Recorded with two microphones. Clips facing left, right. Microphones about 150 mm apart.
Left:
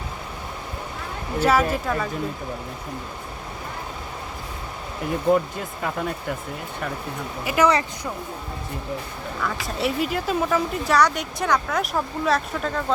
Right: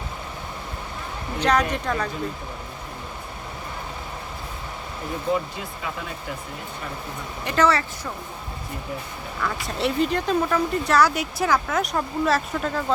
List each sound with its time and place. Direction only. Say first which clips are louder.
1.4 s a woman's voice: left 2 dB; 5° left (ahead or behind)
5.8 s speech: left 7 dB; 50° left (ahead or behind)
7.4 s a woman's voice: left 1 dB; 10° left (ahead or behind)
9.4 s speech: even; centre (ahead or behind)